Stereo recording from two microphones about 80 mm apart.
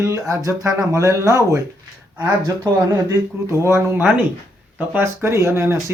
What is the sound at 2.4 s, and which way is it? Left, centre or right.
Speech, right.